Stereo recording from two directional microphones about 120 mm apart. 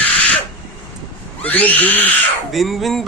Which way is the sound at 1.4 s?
15° left (ahead or behind).